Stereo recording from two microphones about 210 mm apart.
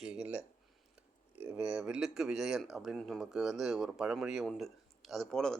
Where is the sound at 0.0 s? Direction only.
5° right (ahead or behind).